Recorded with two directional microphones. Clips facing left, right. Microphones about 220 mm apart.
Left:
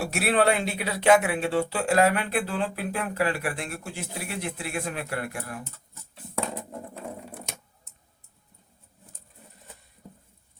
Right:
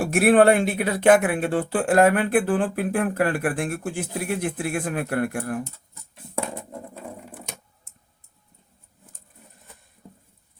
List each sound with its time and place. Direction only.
0.0 s speech: 50° right (ahead or behind)